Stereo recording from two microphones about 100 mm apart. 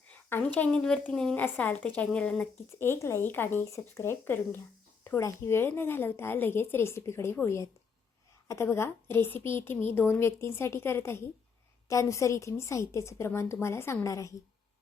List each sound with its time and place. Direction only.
0.1 s speech: 15° left (ahead or behind)
1.5 s speech: 15° left (ahead or behind)
2.7 s a woman's voice: 25° left (ahead or behind)